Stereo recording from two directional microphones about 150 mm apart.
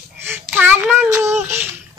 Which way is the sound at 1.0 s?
20° right (ahead or behind).